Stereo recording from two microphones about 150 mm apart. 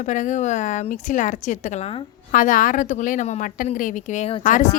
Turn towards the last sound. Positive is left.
turn(degrees=60)  # may be behind; listen again after turning